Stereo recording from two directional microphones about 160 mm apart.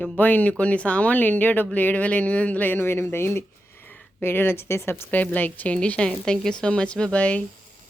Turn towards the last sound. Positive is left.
turn(degrees=10)  # may be behind; listen again after turning